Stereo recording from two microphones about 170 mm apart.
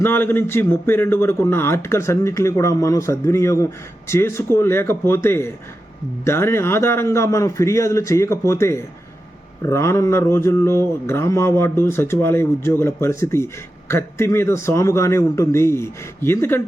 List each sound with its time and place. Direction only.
0.0 s speech: 15° left (ahead or behind)